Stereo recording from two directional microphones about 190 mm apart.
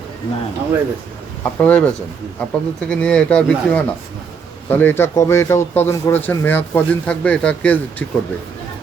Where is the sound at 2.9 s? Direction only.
5° left (ahead or behind).